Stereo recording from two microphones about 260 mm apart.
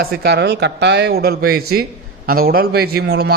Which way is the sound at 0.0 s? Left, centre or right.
Right.